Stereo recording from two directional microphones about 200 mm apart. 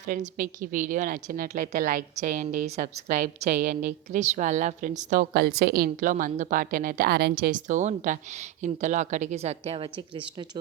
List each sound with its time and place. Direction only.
0.0 s a woman's voice: 40° right (ahead or behind)
5.3 s a woman's voice: 50° right (ahead or behind); by 10.6 s 20° right (ahead or behind)